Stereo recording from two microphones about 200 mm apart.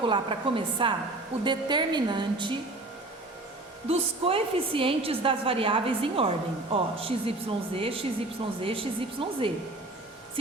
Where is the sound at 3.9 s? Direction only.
30° right (ahead or behind).